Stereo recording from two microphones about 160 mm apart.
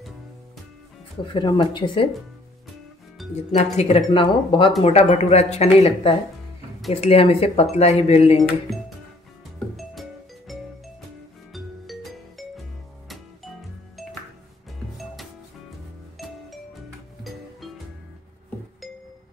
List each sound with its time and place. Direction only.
1.2 s speech: 30° left (ahead or behind)
3.2 s music: centre (ahead or behind)
3.5 s speech: 40° left (ahead or behind)
4.8 s speech: 40° left (ahead or behind)
8.7 s music: centre (ahead or behind)
11.5 s music: centre (ahead or behind)